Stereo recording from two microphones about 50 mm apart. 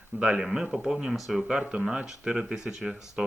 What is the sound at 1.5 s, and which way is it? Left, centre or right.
Speech, centre.